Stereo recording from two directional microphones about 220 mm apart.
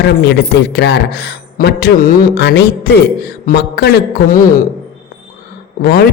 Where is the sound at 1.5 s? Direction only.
45° left (ahead or behind).